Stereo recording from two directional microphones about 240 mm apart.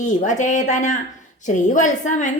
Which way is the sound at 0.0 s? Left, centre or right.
Left.